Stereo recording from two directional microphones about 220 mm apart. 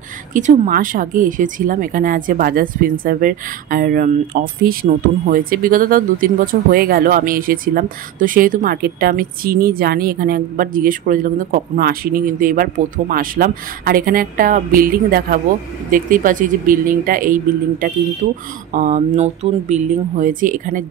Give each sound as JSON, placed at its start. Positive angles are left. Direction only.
{"t": 0.3, "sound": "speech", "side_deg": -35}